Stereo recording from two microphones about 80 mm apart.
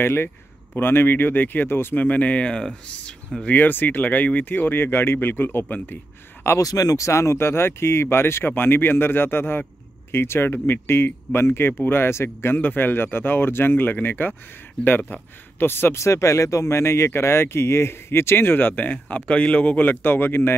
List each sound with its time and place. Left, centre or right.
0.0 s speech: left; by 3.5 s centre
3.5 s speech: left
6.6 s speech: left